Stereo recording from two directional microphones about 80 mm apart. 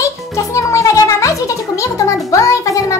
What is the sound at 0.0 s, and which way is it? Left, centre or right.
Music, left.